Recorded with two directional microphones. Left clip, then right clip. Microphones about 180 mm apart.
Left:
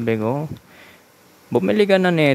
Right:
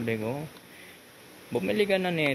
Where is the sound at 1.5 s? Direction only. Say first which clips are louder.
Left 10 dB; 40° left (ahead or behind).